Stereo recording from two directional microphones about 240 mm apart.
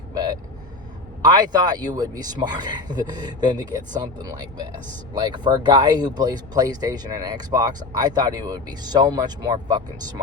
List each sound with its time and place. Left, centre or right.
0.1 s vehicle: centre
1.2 s speech: centre